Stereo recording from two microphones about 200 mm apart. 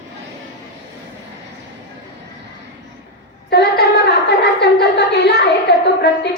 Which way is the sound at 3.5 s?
55° left (ahead or behind).